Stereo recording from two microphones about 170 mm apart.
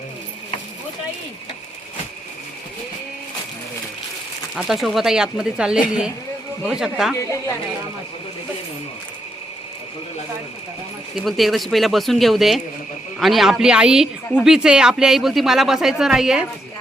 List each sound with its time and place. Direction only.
4.5 s speech: centre (ahead or behind)
7.2 s speech: 15° left (ahead or behind)
11.1 s speech: centre (ahead or behind)